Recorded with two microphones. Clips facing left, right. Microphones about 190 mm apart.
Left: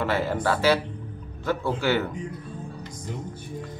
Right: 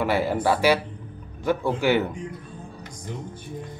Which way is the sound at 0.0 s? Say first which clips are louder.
Right 2 dB; 10° right (ahead or behind).